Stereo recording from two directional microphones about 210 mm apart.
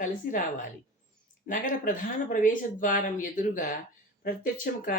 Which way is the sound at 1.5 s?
40° left (ahead or behind).